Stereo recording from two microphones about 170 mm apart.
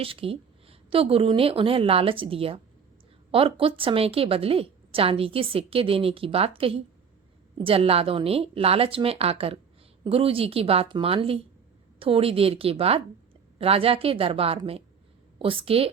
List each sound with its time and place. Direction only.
0.0 s a woman's voice: 35° right (ahead or behind)